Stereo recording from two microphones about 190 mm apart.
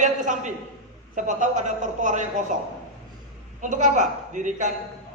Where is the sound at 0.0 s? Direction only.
40° right (ahead or behind).